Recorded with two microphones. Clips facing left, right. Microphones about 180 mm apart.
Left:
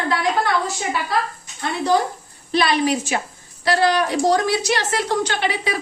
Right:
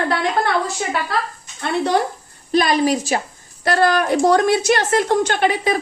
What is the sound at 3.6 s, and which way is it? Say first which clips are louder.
A woman's voice: right 2 dB; 50° right (ahead or behind).